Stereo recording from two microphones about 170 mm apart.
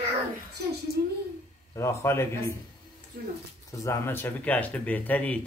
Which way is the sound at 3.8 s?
15° left (ahead or behind).